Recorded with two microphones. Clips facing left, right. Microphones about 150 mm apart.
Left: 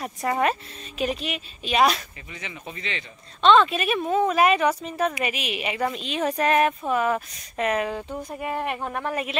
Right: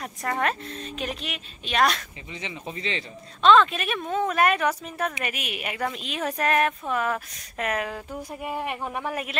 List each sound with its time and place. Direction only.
0.0 s speech: 5° left (ahead or behind)
2.4 s speech: 30° right (ahead or behind)
3.4 s speech: centre (ahead or behind)